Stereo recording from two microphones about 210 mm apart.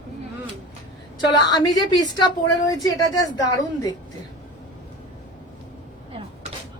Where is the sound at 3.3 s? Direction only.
20° left (ahead or behind).